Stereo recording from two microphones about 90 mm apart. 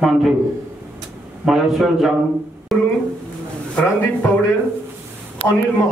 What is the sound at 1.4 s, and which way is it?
Speech, 5° right (ahead or behind).